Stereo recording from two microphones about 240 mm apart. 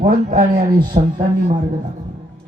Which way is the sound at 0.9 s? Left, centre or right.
Right.